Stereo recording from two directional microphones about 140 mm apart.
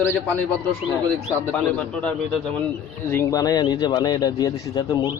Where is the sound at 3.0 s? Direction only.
20° left (ahead or behind).